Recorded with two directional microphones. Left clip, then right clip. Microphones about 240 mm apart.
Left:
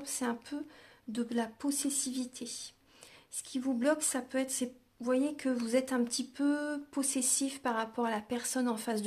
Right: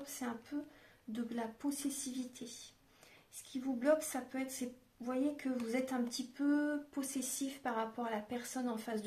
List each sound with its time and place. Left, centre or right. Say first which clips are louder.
0.0 s speech: left 7 dB; left
3.5 s speech: left 2 dB; left